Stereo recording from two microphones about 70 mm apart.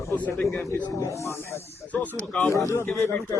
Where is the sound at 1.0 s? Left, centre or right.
Left.